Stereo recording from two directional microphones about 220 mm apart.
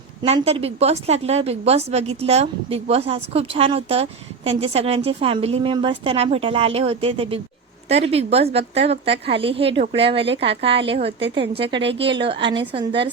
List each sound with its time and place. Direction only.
0.2 s a woman's voice: 25° right (ahead or behind)